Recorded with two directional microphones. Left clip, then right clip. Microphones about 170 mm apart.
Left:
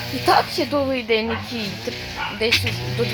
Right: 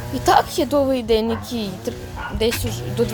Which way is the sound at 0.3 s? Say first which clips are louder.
Right 2 dB; 20° right (ahead or behind).